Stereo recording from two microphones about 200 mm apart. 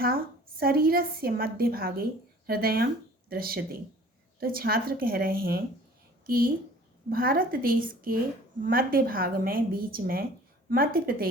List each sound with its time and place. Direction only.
0.6 s a woman's voice: 50° right (ahead or behind)